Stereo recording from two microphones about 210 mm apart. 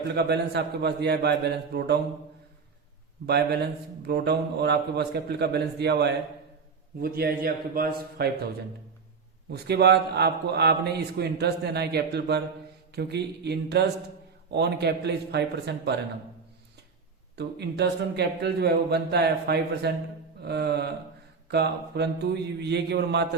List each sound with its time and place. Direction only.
0.1 s a man's voice: 50° right (ahead or behind)
3.2 s a man's voice: 50° right (ahead or behind)
9.5 s a man's voice: 50° right (ahead or behind)
17.3 s a man's voice: 55° right (ahead or behind)